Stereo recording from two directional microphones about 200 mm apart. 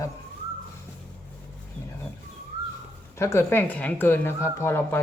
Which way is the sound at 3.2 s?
10° left (ahead or behind).